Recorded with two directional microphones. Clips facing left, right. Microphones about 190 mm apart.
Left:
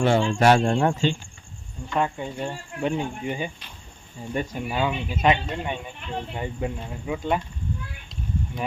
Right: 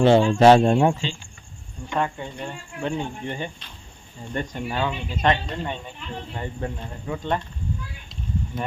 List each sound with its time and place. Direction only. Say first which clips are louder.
0.0 s speech: right 5 dB; 20° right (ahead or behind)
2.0 s speech: left 1 dB; 10° left (ahead or behind)
8.5 s speech: even; 5° right (ahead or behind)